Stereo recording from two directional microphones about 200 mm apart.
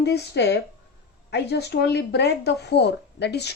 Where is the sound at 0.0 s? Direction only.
55° left (ahead or behind).